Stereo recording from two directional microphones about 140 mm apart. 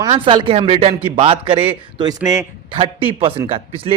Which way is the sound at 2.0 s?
25° right (ahead or behind).